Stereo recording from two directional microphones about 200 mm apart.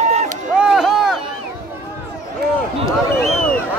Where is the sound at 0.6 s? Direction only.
Centre (ahead or behind).